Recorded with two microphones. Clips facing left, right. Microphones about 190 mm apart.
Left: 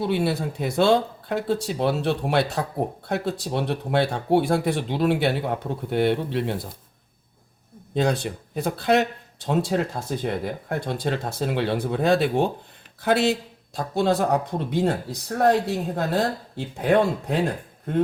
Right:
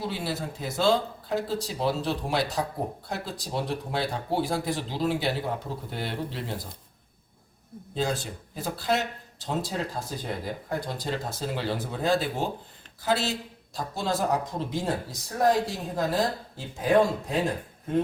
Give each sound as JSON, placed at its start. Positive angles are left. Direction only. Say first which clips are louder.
{"t": 0.0, "sound": "speech", "louder": "left 8 dB", "side_deg": 60}
{"t": 7.9, "sound": "speech", "louder": "left 6 dB", "side_deg": 65}